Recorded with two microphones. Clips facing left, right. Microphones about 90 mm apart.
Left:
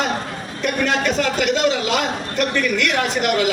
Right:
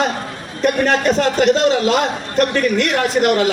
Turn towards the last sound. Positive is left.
turn(degrees=-40)  # may be behind; listen again after turning